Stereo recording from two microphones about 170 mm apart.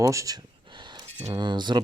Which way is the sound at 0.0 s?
20° right (ahead or behind).